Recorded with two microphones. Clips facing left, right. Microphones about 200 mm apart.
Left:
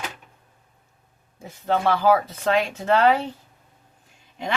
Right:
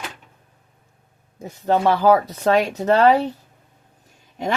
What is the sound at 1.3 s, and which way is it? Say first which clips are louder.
Speech: right 4 dB; 40° right (ahead or behind).